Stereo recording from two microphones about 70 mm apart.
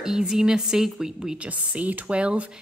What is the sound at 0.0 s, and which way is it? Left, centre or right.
A woman's voice, centre.